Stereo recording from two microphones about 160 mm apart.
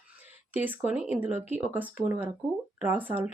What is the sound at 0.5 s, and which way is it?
Speech, 10° right (ahead or behind).